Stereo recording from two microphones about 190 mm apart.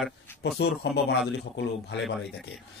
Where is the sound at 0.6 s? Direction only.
60° left (ahead or behind).